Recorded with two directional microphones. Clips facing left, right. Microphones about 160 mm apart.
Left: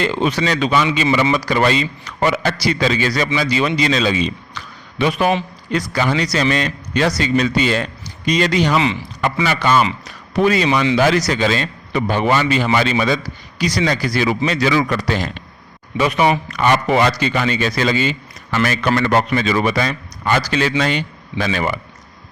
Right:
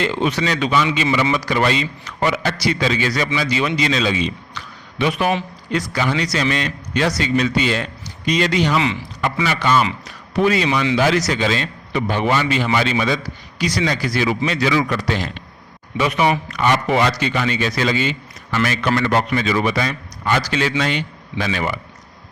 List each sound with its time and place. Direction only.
0.0 s a man's voice: 35° left (ahead or behind)
16.0 s a man's voice: 30° left (ahead or behind)